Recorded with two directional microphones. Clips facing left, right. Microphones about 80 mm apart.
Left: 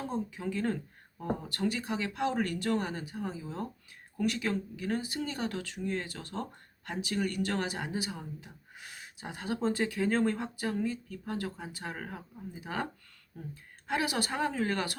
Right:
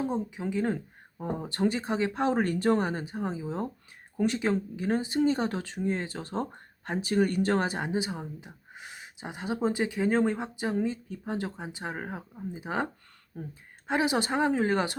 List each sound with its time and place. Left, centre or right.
0.0 s speech: centre